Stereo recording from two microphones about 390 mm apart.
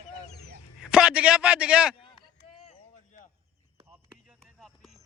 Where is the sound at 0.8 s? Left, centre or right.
Centre.